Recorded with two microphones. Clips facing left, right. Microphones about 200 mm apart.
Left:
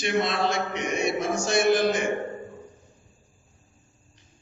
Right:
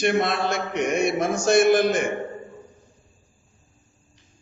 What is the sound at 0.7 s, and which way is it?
A man's voice, 55° right (ahead or behind).